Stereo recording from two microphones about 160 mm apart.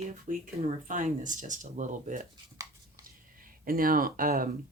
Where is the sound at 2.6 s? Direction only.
20° right (ahead or behind).